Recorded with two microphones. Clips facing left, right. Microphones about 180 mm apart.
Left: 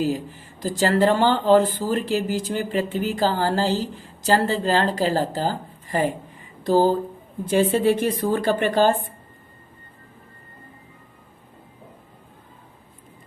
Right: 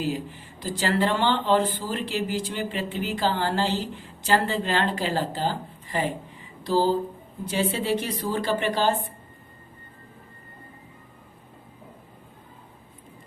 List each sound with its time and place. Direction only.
0.0 s speech: 45° left (ahead or behind)
7.4 s speech: 50° left (ahead or behind)